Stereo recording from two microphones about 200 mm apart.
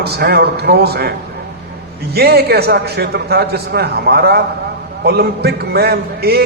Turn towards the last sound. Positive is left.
turn(degrees=-50)  # may be behind; listen again after turning